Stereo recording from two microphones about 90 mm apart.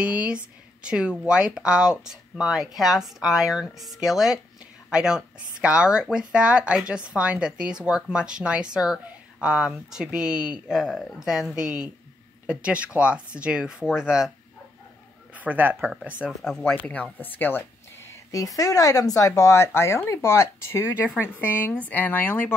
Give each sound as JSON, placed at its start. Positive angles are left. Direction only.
{"t": 0.0, "sound": "speech", "side_deg": -15}
{"t": 10.8, "sound": "speech", "side_deg": 0}
{"t": 15.3, "sound": "speech", "side_deg": -20}
{"t": 16.3, "sound": "speech", "side_deg": 5}
{"t": 16.8, "sound": "speech", "side_deg": 15}